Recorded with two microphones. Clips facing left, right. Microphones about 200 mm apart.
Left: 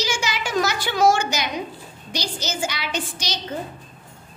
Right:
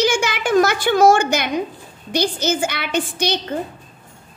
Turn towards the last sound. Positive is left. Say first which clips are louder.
# right 8 dB
turn(degrees=-55)  # may be behind; listen again after turning